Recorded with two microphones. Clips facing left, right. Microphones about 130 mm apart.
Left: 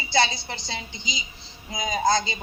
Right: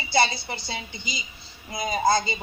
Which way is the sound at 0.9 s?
60° right (ahead or behind).